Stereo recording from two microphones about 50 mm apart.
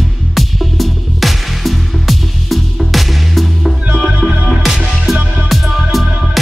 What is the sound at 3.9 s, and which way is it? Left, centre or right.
Music, centre.